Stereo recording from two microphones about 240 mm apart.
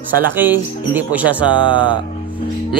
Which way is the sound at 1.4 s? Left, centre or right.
Centre.